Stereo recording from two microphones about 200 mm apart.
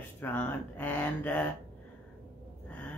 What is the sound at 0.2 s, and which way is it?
Speech, 10° left (ahead or behind).